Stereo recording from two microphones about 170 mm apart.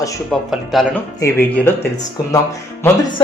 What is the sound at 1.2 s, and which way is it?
Speech, 10° left (ahead or behind).